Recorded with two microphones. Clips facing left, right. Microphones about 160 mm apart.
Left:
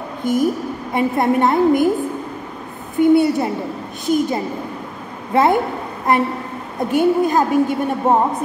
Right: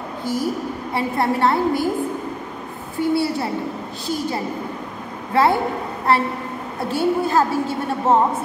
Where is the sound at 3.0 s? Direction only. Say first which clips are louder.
Left 7 dB; 20° left (ahead or behind).